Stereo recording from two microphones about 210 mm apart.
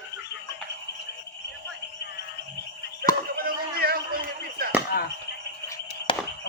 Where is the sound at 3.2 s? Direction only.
45° right (ahead or behind).